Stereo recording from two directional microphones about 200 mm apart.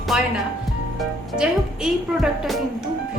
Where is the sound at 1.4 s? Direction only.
Centre (ahead or behind).